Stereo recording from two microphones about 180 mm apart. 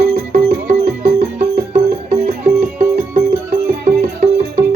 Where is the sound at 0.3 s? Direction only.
40° right (ahead or behind).